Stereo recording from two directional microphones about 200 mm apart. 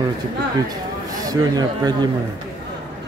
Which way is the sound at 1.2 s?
20° right (ahead or behind).